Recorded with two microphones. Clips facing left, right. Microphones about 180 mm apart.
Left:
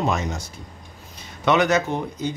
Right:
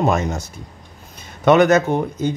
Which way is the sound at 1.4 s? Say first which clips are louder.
Right 6 dB; 50° right (ahead or behind).